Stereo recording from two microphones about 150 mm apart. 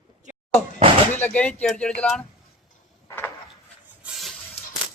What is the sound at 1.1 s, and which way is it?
Speech, 10° left (ahead or behind).